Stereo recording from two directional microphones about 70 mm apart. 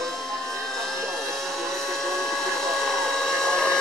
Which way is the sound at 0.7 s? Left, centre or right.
Centre.